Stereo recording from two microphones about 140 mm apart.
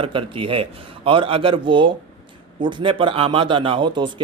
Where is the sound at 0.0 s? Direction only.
40° right (ahead or behind).